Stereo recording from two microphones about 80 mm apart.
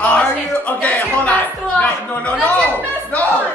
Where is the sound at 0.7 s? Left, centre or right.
Centre.